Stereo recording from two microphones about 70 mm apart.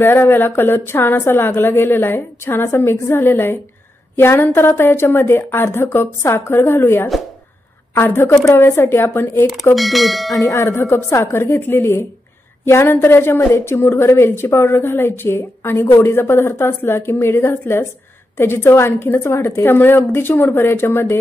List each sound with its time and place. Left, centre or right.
0.0 s a woman's voice: left
9.8 s speech: centre
10.3 s tubular bells: left
10.6 s a woman's voice: left